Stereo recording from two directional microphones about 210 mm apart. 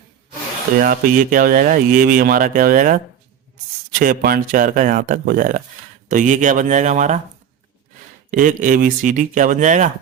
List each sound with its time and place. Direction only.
0.8 s speech: 40° right (ahead or behind)
8.3 s speech: 40° right (ahead or behind)